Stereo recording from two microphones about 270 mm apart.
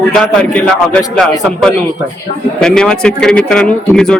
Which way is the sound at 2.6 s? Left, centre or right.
Centre.